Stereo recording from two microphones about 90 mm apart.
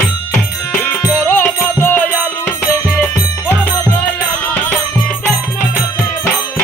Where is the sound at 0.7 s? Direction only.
20° left (ahead or behind).